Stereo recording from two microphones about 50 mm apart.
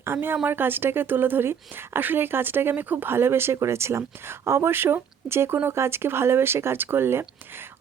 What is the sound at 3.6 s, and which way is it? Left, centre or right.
A woman's voice, right.